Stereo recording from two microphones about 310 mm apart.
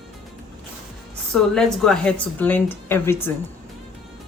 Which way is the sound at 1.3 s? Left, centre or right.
Centre.